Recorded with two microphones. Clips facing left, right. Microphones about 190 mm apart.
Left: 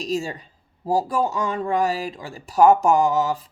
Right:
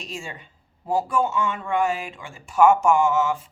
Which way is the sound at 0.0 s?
35° left (ahead or behind).